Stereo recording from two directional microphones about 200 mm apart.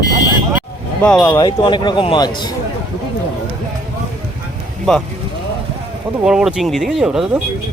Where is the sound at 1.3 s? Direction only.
20° left (ahead or behind).